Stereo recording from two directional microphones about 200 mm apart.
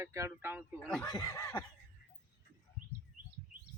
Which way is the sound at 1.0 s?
20° left (ahead or behind).